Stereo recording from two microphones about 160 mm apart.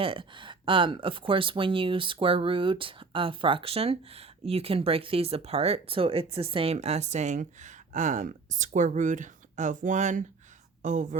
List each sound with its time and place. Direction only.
0.0 s a woman's voice: 35° right (ahead or behind); by 11.2 s 50° right (ahead or behind)